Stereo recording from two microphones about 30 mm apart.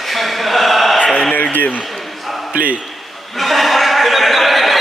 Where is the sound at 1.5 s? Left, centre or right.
Left.